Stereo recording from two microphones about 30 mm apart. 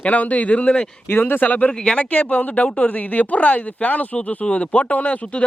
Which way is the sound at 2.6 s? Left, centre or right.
Left.